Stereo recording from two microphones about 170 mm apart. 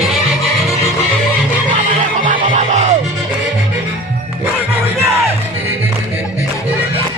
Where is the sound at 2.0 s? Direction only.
50° right (ahead or behind).